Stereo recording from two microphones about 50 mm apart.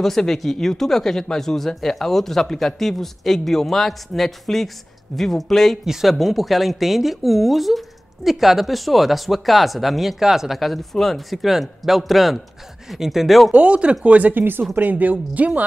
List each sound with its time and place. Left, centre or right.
0.0 s speech: centre
13.5 s speech: right